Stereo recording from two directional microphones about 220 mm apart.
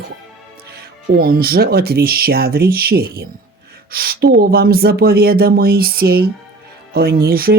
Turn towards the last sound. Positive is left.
turn(degrees=-45)  # may be behind; listen again after turning